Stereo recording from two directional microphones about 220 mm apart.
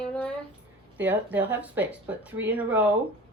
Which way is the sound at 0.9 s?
10° right (ahead or behind).